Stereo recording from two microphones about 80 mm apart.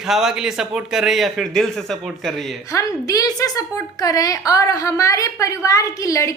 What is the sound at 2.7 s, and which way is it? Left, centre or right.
A woman's voice, left.